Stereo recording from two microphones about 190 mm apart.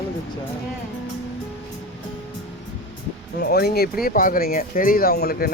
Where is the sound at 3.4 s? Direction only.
60° left (ahead or behind).